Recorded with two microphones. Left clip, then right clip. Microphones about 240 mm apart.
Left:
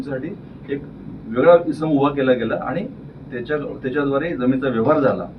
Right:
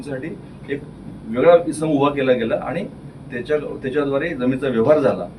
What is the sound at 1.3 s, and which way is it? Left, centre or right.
A man's voice, centre.